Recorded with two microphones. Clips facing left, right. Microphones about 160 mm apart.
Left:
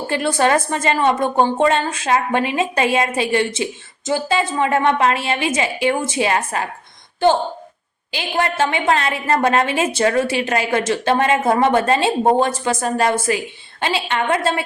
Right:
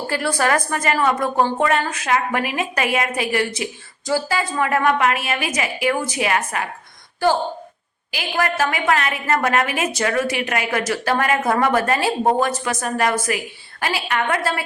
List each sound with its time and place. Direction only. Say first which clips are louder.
0.1 s a woman's voice: left 3 dB; 25° left (ahead or behind)